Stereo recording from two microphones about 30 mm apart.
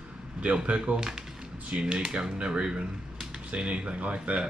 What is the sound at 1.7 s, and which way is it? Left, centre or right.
Speech, right.